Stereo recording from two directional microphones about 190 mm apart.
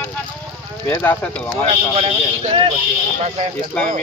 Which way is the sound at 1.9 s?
30° right (ahead or behind).